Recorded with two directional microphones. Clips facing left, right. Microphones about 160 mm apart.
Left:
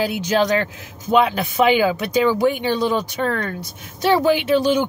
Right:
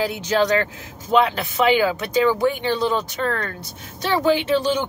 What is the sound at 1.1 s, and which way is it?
Speech, 15° left (ahead or behind).